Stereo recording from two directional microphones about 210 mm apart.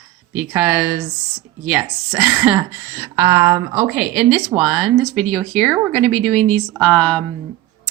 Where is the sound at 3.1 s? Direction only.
15° right (ahead or behind).